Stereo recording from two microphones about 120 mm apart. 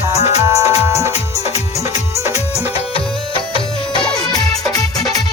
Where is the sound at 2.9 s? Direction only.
45° left (ahead or behind).